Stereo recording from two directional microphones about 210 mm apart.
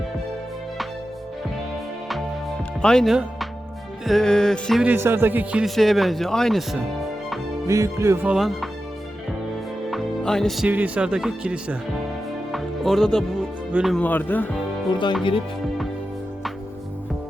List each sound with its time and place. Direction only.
2.8 s speech: centre (ahead or behind)
7.7 s music: 15° right (ahead or behind)
9.9 s speech: centre (ahead or behind)
12.5 s music: centre (ahead or behind)
13.7 s speech: centre (ahead or behind)
15.2 s speech: 25° left (ahead or behind)